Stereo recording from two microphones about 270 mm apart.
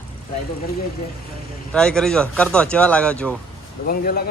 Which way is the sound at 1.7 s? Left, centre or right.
Centre.